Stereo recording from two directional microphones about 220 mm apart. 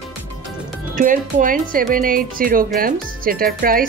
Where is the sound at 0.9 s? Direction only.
35° right (ahead or behind).